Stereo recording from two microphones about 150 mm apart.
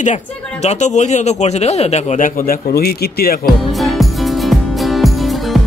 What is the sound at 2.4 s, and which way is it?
Speech, 80° left.